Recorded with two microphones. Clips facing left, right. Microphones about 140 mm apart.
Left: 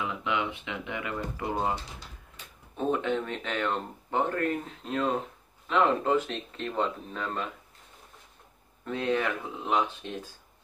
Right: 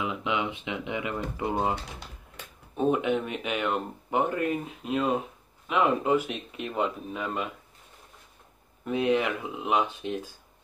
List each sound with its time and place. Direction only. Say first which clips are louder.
0.0 s speech: right 1 dB; 20° right (ahead or behind)
8.8 s speech: right 3 dB; 15° right (ahead or behind)